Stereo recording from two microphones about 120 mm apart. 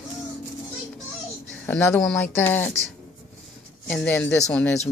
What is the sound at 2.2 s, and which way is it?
Speech, 15° left (ahead or behind).